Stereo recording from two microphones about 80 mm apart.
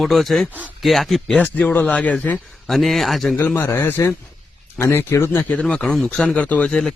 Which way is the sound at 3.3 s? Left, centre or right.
Left.